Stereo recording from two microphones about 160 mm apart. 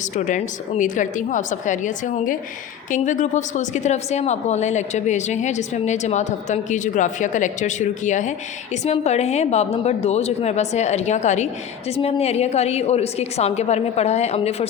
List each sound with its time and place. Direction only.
0.0 s a woman's voice: 50° left (ahead or behind)